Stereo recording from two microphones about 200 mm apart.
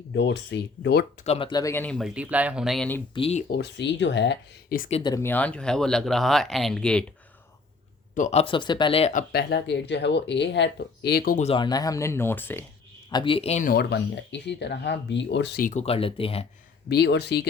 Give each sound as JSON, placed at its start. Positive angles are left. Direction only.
{"t": 0.1, "sound": "speech", "side_deg": 60}
{"t": 1.2, "sound": "speech", "side_deg": 30}
{"t": 3.2, "sound": "speech", "side_deg": 30}
{"t": 3.5, "sound": "speech", "side_deg": 55}
{"t": 4.8, "sound": "speech", "side_deg": 30}
{"t": 5.0, "sound": "speech", "side_deg": 15}
{"t": 8.1, "sound": "speech", "side_deg": 35}
{"t": 9.3, "sound": "speech", "side_deg": 55}
{"t": 11.4, "sound": "speech", "side_deg": 25}
{"t": 13.1, "sound": "speech", "side_deg": 25}
{"t": 13.7, "sound": "speech", "side_deg": 55}
{"t": 15.6, "sound": "speech", "side_deg": 35}
{"t": 16.9, "sound": "speech", "side_deg": 55}